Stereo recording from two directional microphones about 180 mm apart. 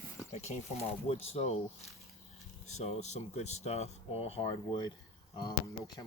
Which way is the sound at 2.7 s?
40° left (ahead or behind).